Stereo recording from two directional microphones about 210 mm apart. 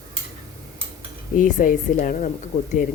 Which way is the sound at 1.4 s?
40° left (ahead or behind).